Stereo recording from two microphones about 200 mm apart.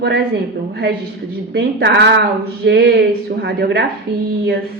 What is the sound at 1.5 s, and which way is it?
Speech, 60° right (ahead or behind).